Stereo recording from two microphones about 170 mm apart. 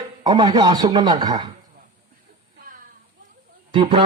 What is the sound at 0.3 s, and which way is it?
A man's voice, 25° right (ahead or behind).